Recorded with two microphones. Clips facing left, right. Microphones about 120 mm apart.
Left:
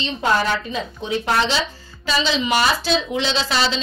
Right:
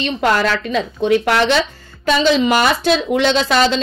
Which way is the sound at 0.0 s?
80° right.